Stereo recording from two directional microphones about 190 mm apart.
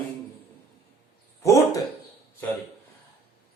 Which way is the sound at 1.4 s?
15° left (ahead or behind).